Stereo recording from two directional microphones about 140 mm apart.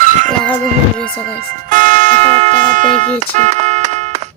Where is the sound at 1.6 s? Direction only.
70° right (ahead or behind); by 2.5 s 50° right (ahead or behind).